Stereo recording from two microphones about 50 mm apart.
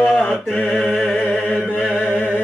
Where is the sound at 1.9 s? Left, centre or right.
Centre.